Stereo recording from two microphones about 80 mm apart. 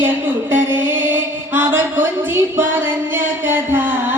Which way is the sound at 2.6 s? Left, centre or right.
Right.